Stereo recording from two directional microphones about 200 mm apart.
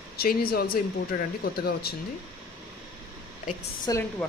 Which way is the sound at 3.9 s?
20° left (ahead or behind).